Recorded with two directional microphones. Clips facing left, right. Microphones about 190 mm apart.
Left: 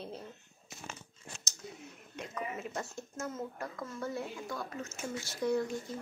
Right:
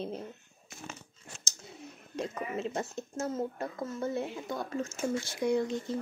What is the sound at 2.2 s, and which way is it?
A woman's voice, 25° right (ahead or behind).